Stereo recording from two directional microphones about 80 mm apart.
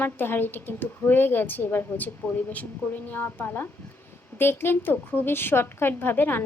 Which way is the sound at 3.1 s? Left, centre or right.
Left.